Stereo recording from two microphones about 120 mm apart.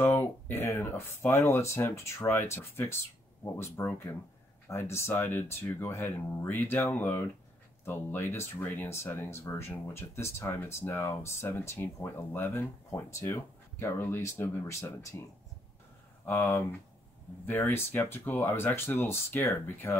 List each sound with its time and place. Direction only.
0.0 s speech: 15° left (ahead or behind)
16.3 s speech: 15° left (ahead or behind)